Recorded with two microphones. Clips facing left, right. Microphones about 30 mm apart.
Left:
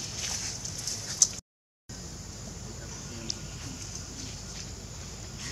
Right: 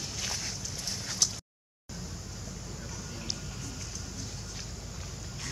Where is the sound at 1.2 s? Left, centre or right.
Right.